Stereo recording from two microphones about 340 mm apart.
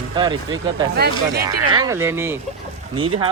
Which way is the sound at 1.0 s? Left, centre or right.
Right.